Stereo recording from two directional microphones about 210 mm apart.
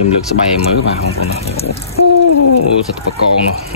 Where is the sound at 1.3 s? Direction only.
30° left (ahead or behind).